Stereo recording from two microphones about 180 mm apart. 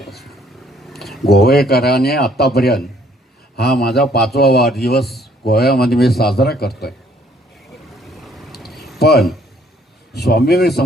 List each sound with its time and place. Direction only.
0.0 s vehicle: centre (ahead or behind)
0.8 s a sound: centre (ahead or behind)
1.2 s speech: 60° left (ahead or behind)
8.0 s vehicle: centre (ahead or behind)
9.0 s a sound: 60° left (ahead or behind)
10.1 s speech: 60° left (ahead or behind)